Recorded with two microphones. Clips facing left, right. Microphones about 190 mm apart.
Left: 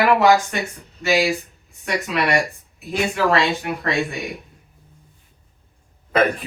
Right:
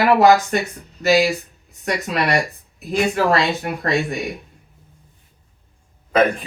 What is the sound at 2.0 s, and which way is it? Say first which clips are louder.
Speech: even; 40° right (ahead or behind).